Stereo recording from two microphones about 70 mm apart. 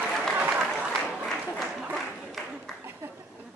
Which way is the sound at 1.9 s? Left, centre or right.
Centre.